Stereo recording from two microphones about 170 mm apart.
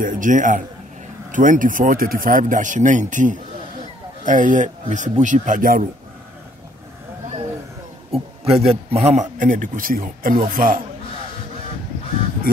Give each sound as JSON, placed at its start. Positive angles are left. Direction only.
{"t": 0.0, "sound": "speech", "side_deg": -50}
{"t": 8.1, "sound": "speech", "side_deg": -35}